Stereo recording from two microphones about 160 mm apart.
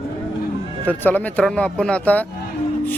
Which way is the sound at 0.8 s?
10° left (ahead or behind).